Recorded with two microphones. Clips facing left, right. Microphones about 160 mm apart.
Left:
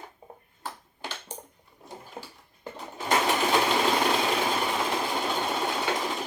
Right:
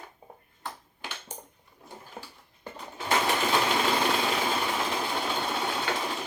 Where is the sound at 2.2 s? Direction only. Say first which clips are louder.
Left 2 dB; 10° left (ahead or behind).